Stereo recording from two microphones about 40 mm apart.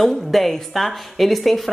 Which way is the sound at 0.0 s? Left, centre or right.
Centre.